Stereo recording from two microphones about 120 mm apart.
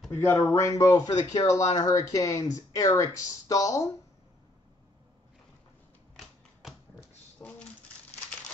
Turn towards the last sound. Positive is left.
turn(degrees=20)  # may be behind; listen again after turning